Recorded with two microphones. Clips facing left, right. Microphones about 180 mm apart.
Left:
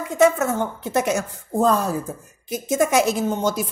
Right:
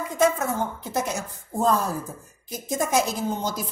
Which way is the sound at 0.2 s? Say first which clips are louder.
Left 5 dB; 75° left (ahead or behind).